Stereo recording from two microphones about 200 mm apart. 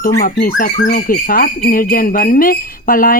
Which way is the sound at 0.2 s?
45° left (ahead or behind).